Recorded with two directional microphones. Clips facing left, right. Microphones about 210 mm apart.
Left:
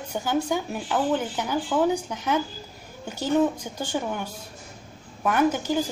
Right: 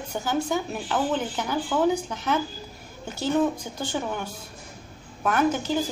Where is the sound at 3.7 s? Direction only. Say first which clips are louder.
Left 1 dB; 10° left (ahead or behind).